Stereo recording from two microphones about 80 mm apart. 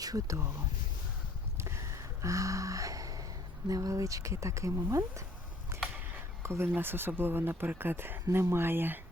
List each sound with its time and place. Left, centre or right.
0.0 s speech: right
1.5 s a sound: right
3.7 s speech: right
6.4 s speech: right